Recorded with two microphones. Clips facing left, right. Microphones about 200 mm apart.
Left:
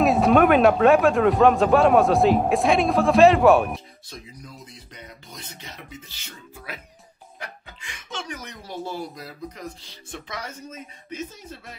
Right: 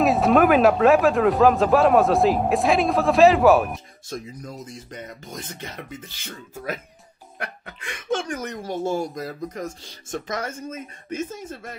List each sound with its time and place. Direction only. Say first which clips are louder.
0.0 s speech: even; centre (ahead or behind)
4.1 s speech: right 8 dB; 45° right (ahead or behind)
7.3 s speech: right 5 dB; 60° right (ahead or behind)